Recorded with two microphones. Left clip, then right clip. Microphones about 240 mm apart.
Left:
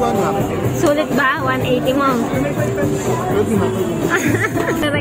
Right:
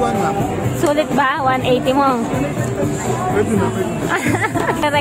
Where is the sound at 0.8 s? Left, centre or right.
Centre.